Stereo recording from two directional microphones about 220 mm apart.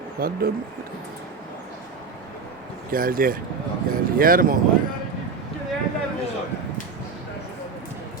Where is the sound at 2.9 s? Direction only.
40° right (ahead or behind).